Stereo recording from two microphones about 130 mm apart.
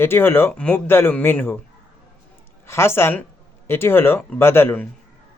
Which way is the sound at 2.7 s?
20° left (ahead or behind).